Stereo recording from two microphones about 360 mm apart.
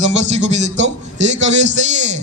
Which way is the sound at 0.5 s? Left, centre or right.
Centre.